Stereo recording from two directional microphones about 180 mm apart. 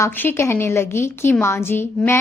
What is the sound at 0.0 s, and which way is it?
A woman's voice, 10° left (ahead or behind).